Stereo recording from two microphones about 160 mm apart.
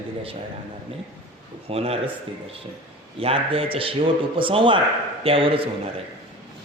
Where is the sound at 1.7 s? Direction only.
40° right (ahead or behind).